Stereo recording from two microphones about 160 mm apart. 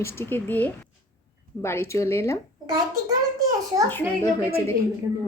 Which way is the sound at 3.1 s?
20° right (ahead or behind).